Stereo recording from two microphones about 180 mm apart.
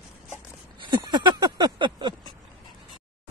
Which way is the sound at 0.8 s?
25° right (ahead or behind).